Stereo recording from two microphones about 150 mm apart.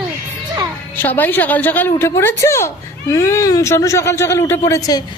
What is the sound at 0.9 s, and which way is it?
A woman's voice, 10° left (ahead or behind).